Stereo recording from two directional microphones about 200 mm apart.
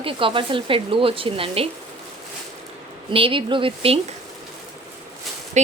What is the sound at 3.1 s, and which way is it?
Speech, 25° right (ahead or behind).